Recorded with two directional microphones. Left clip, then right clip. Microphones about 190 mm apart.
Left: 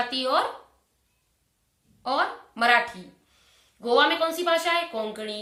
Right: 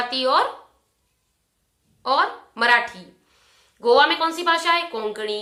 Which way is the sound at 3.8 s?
20° right (ahead or behind).